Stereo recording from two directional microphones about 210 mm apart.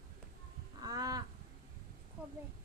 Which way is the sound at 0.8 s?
15° right (ahead or behind).